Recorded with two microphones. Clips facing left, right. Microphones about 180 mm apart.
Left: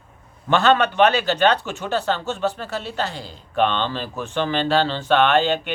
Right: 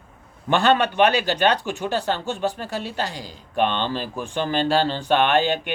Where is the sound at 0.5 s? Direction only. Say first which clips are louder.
Left 1 dB; 15° right (ahead or behind).